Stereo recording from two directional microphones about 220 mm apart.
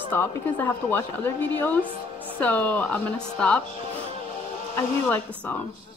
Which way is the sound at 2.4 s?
5° left (ahead or behind).